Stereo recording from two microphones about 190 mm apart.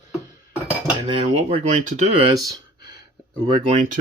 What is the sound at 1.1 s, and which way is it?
Speech, 35° right (ahead or behind).